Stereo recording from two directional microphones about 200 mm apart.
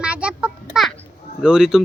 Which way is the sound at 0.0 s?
5° right (ahead or behind).